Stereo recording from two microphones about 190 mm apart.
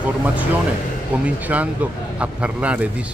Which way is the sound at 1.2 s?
5° right (ahead or behind).